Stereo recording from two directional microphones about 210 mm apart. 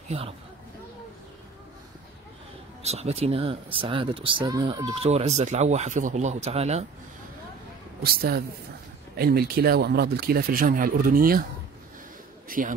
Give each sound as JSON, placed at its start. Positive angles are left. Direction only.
{"t": 2.8, "sound": "speech", "side_deg": -30}
{"t": 8.0, "sound": "speech", "side_deg": -45}
{"t": 12.4, "sound": "a man's voice", "side_deg": -40}